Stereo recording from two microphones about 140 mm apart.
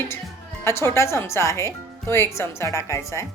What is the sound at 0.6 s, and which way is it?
Speech, 20° left (ahead or behind).